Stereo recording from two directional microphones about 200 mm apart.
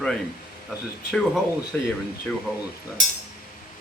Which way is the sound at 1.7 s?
10° left (ahead or behind).